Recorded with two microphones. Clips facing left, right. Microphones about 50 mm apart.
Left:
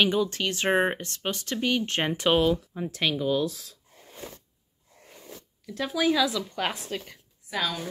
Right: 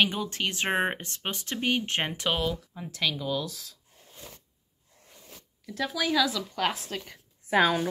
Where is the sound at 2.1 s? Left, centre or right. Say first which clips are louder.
Left 6 dB; centre.